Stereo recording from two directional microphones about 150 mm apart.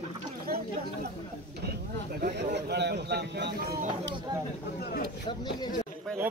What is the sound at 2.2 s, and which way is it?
A man's voice, 80° right.